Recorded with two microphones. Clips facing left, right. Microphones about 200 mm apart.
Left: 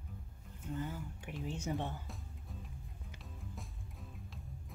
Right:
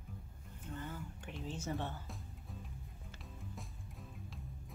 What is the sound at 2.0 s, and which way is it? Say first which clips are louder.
Music: even; centre (ahead or behind).